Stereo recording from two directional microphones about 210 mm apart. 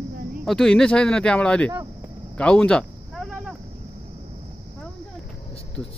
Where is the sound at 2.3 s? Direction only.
5° left (ahead or behind).